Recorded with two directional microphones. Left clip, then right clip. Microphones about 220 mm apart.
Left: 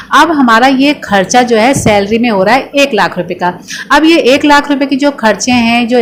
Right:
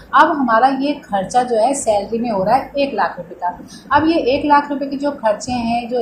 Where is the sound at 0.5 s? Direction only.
45° left (ahead or behind).